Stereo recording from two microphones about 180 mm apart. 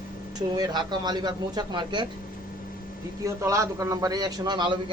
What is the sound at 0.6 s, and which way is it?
A man's voice, 25° right (ahead or behind).